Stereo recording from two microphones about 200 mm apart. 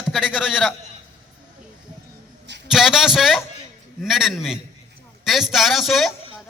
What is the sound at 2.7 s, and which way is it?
A man's voice, centre (ahead or behind).